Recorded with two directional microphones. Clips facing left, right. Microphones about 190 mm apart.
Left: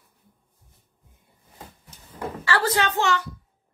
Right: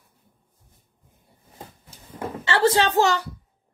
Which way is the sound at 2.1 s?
25° right (ahead or behind).